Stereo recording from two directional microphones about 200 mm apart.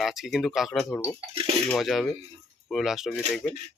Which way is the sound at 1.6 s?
Centre (ahead or behind).